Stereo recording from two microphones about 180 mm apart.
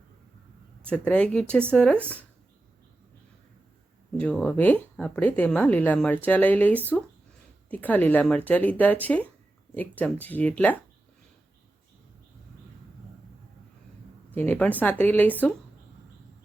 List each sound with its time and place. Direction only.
0.9 s a woman's voice: 5° left (ahead or behind)
4.2 s a woman's voice: 5° left (ahead or behind)
14.3 s a woman's voice: 10° left (ahead or behind)